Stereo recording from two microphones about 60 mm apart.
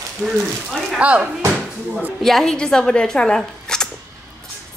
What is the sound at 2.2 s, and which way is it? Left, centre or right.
Speech, centre.